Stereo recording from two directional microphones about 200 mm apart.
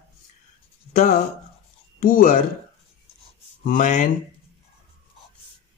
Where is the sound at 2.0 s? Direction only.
45° left (ahead or behind).